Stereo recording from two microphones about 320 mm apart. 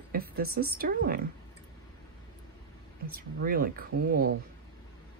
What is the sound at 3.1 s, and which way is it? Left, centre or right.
Speech, right.